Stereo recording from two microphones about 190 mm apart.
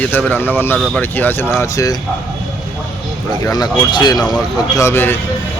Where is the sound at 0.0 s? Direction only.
10° left (ahead or behind).